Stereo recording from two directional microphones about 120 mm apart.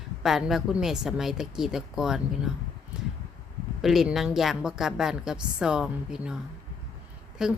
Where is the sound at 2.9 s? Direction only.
5° right (ahead or behind).